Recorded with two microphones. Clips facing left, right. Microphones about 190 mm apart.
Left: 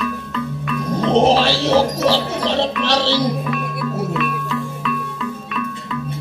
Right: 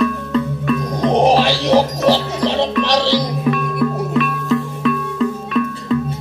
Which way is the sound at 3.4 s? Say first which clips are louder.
Right 6 dB; 40° right (ahead or behind).